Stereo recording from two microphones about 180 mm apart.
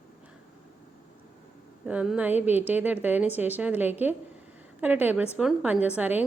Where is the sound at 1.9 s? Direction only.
5° right (ahead or behind).